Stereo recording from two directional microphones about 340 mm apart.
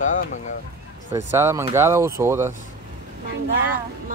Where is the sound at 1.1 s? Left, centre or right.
Centre.